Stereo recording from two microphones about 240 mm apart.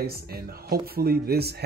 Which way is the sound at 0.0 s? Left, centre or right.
Right.